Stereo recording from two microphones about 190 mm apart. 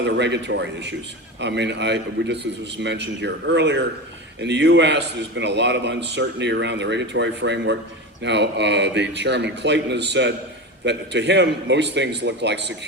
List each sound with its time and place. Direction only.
0.0 s a man's voice: 65° right (ahead or behind)